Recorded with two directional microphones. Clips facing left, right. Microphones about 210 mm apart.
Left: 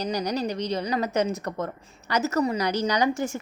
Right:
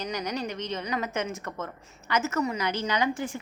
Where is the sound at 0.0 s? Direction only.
35° left (ahead or behind).